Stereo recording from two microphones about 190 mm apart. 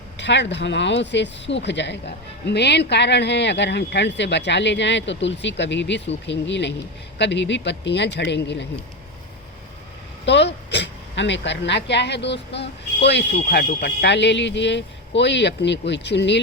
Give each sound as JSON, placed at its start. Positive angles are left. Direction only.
{"t": 0.2, "sound": "speech", "side_deg": 65}
{"t": 10.2, "sound": "speech", "side_deg": 65}